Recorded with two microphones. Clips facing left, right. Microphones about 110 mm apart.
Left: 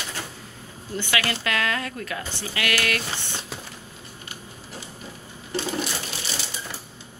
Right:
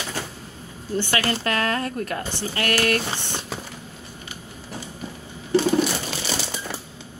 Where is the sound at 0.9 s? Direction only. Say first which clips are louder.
Right 3 dB; 35° right (ahead or behind).